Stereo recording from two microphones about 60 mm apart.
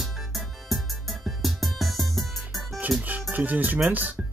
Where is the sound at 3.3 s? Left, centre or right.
Right.